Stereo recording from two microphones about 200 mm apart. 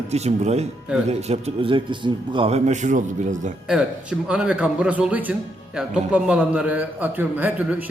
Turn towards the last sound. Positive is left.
turn(degrees=-10)  # may be behind; listen again after turning